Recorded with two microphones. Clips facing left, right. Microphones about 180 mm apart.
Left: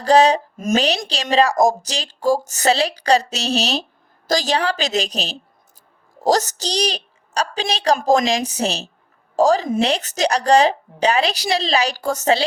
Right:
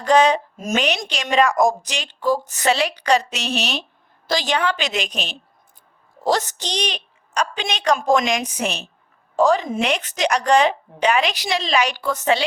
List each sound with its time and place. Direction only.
0.0 s a woman's voice: 35° left (ahead or behind)